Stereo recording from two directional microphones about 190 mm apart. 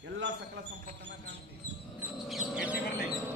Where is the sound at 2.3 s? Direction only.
Centre (ahead or behind).